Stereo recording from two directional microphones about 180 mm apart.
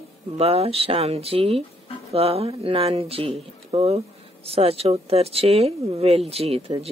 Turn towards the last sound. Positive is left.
turn(degrees=-35)  # may be behind; listen again after turning